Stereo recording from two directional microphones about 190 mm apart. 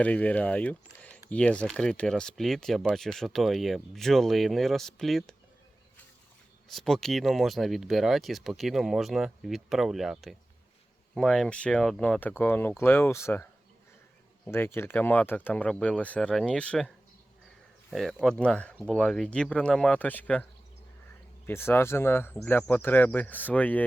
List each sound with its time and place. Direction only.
0.0 s speech: 10° left (ahead or behind)
6.7 s speech: centre (ahead or behind)
17.9 s speech: centre (ahead or behind)